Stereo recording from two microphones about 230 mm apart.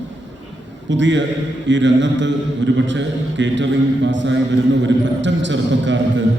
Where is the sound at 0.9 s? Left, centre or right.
Right.